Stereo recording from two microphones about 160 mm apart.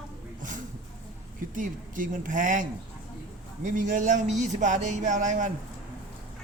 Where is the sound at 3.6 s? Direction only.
55° right (ahead or behind).